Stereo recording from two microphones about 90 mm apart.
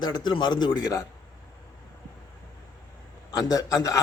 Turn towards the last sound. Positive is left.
turn(degrees=40)  # may be behind; listen again after turning